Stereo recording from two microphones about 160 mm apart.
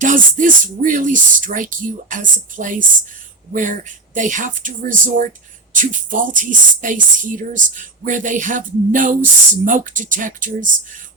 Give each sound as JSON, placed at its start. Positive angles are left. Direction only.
{"t": 0.0, "sound": "speech", "side_deg": -55}